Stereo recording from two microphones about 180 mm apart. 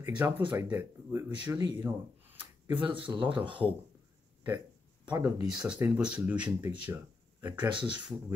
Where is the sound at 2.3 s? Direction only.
10° right (ahead or behind).